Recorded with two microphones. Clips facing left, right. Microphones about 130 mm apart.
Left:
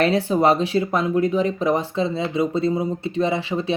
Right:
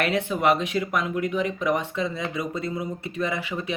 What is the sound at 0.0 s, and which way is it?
Speech, 35° left (ahead or behind).